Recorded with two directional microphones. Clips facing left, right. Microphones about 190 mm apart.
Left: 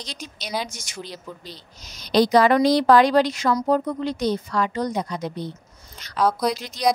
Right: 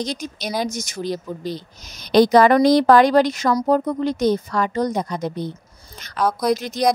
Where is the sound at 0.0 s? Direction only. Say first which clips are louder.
Right 10 dB; 45° right (ahead or behind).